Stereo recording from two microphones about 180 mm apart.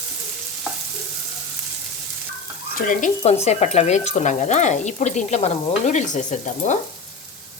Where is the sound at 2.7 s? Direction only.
45° left (ahead or behind).